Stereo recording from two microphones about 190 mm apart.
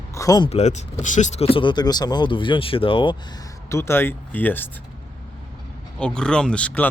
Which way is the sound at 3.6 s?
15° left (ahead or behind).